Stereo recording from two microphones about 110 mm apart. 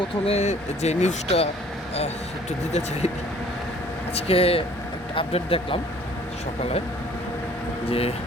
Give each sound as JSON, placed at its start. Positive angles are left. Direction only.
{"t": 0.3, "sound": "speech", "side_deg": 85}
{"t": 2.5, "sound": "speech", "side_deg": 90}
{"t": 4.1, "sound": "speech", "side_deg": 60}
{"t": 7.9, "sound": "speech", "side_deg": 60}